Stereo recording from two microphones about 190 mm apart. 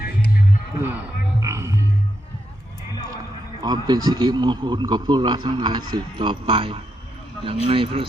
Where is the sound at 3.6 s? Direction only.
20° right (ahead or behind).